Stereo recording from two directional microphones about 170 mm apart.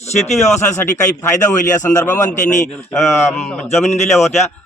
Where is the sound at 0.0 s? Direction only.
40° left (ahead or behind).